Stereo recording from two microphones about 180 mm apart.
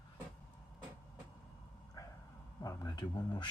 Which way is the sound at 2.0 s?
20° left (ahead or behind).